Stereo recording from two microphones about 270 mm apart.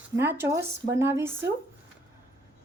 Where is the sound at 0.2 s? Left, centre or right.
Centre.